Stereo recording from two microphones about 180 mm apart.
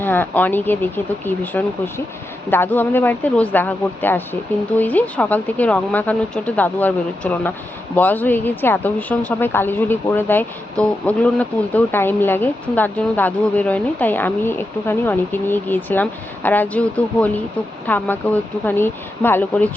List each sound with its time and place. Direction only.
0.0 s a woman's voice: 10° left (ahead or behind)